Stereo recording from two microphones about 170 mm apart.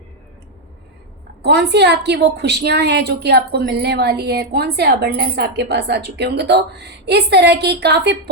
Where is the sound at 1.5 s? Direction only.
80° right.